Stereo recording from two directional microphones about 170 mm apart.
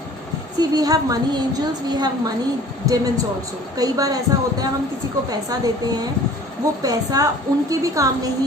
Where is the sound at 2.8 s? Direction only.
20° right (ahead or behind).